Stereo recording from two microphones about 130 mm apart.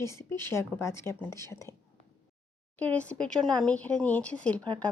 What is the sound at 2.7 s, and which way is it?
Speech, 10° left (ahead or behind).